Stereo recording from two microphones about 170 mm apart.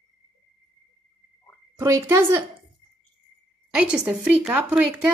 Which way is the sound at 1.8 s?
15° right (ahead or behind).